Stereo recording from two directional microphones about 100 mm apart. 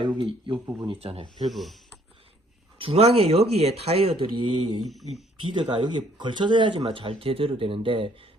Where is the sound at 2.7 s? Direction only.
65° right (ahead or behind); by 4.8 s 50° right (ahead or behind).